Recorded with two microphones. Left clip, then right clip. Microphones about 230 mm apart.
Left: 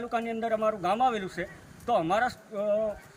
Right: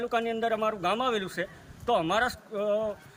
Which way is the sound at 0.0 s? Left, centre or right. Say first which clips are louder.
Right 3 dB; right.